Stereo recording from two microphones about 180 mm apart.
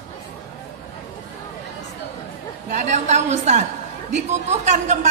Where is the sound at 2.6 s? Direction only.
40° right (ahead or behind).